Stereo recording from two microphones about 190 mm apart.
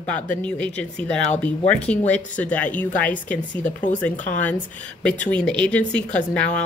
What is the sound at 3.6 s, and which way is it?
Speech, 40° left (ahead or behind).